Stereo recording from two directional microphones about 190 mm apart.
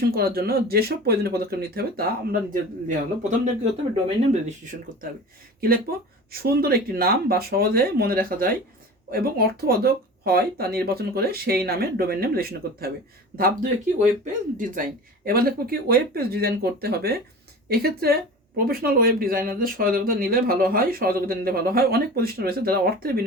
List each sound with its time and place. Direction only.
0.1 s speech: 55° right (ahead or behind)
5.5 s speech: 50° right (ahead or behind)